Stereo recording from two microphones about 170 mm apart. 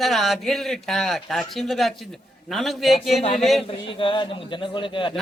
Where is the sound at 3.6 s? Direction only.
30° left (ahead or behind).